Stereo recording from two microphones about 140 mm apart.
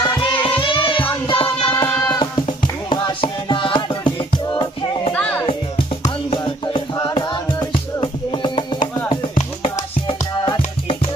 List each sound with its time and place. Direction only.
0.0 s music: 35° left (ahead or behind)
5.1 s music: 10° left (ahead or behind)
6.3 s music: 35° left (ahead or behind)
9.7 s music: 40° left (ahead or behind)